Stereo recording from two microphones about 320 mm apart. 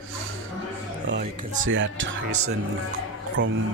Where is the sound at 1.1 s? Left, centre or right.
Right.